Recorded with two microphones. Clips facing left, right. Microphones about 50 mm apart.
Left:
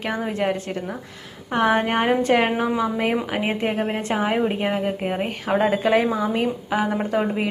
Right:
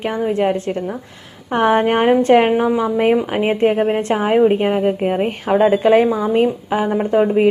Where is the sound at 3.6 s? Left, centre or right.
Right.